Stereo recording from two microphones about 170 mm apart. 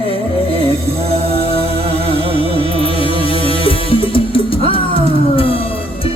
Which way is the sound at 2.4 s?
35° left (ahead or behind).